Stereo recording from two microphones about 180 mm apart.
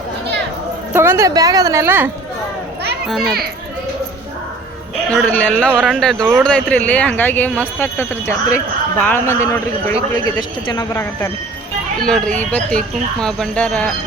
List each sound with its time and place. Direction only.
0.9 s a woman's voice: 15° right (ahead or behind)
3.1 s speech: centre (ahead or behind)
5.1 s speech: 5° left (ahead or behind)
10.7 s speech: 25° left (ahead or behind)
11.9 s speech: 5° left (ahead or behind)